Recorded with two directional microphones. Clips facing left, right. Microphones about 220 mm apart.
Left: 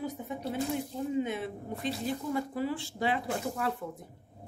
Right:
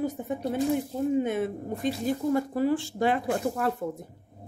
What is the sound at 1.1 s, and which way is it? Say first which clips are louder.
Speech: right 6 dB; 50° right (ahead or behind).